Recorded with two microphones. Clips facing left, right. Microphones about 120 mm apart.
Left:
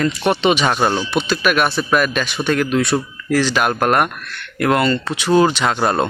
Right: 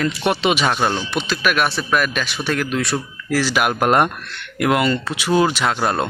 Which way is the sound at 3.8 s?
25° right (ahead or behind).